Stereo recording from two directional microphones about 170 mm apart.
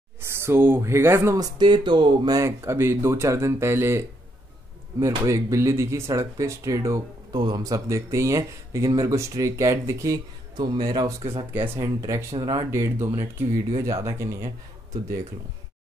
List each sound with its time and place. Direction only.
0.2 s speech: 15° right (ahead or behind)
5.0 s speech: 15° right (ahead or behind)
11.5 s speech: 15° right (ahead or behind)